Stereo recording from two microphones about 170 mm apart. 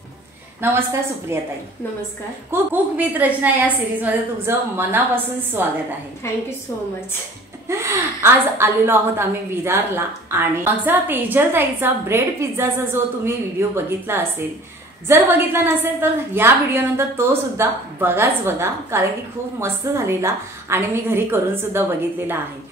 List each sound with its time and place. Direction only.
0.6 s a woman's voice: 15° right (ahead or behind)
2.5 s a woman's voice: 10° right (ahead or behind)
7.6 s a woman's voice: 15° right (ahead or behind)